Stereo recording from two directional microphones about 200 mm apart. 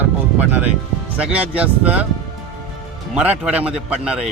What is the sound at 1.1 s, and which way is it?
Speech, 5° right (ahead or behind).